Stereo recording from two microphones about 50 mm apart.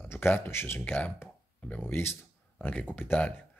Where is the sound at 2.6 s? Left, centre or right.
Left.